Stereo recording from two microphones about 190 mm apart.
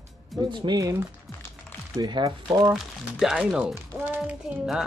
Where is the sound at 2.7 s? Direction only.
Centre (ahead or behind).